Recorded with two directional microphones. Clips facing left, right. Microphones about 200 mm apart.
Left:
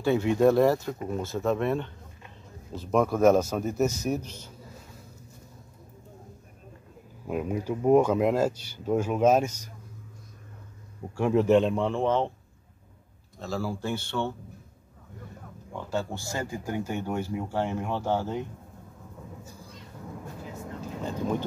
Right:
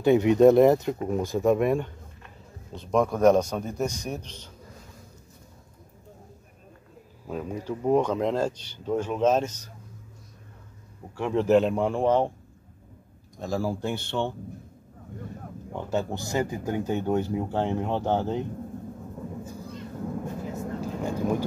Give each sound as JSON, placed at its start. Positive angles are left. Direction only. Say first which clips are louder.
{"t": 0.0, "sound": "speech", "louder": "right 5 dB", "side_deg": -20}
{"t": 2.7, "sound": "a man's voice", "louder": "even", "side_deg": 5}
{"t": 7.2, "sound": "speech", "louder": "left 2 dB", "side_deg": 10}
{"t": 11.1, "sound": "speech", "louder": "left 2 dB", "side_deg": 10}
{"t": 11.4, "sound": "speech", "louder": "right 5 dB", "side_deg": -5}
{"t": 13.4, "sound": "speech", "louder": "right 3 dB", "side_deg": -15}
{"t": 15.7, "sound": "speech", "louder": "right 3 dB", "side_deg": -20}
{"t": 21.0, "sound": "speech", "louder": "right 2 dB", "side_deg": -10}